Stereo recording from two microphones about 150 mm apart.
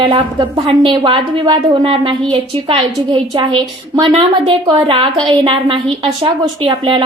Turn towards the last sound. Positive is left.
turn(degrees=-35)  # may be behind; listen again after turning